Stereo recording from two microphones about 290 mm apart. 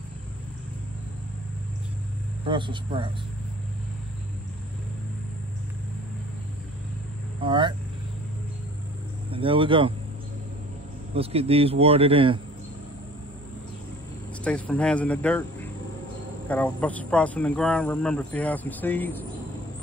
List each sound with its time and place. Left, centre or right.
2.4 s speech: centre
7.4 s speech: centre
9.3 s speech: centre
11.1 s speech: centre
14.4 s speech: centre